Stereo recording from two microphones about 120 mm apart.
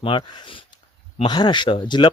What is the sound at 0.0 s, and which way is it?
Speech, 40° left (ahead or behind).